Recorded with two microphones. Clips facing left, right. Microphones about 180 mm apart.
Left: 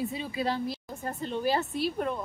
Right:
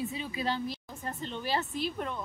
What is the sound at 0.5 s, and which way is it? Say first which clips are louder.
Speech: left 3 dB; 5° left (ahead or behind).